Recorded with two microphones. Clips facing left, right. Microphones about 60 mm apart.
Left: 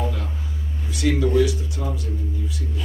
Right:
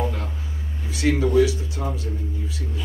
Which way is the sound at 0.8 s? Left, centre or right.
Right.